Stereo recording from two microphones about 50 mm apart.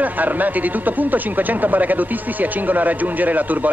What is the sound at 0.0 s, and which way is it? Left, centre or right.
Speech, right.